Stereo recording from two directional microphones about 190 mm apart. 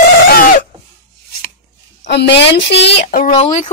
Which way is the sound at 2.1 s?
65° left (ahead or behind).